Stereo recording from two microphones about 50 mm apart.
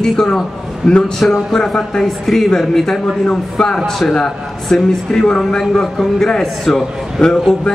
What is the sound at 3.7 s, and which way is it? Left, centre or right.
A man's voice, centre.